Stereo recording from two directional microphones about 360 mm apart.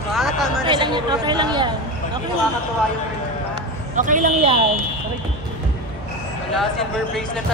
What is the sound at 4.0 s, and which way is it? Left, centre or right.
Speech, right.